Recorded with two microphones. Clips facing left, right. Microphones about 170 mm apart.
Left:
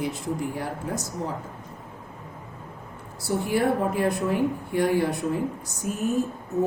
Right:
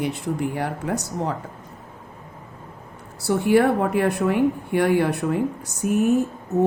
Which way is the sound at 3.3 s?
75° right (ahead or behind).